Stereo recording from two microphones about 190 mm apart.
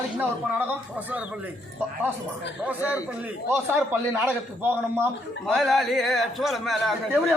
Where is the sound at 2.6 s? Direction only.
10° right (ahead or behind).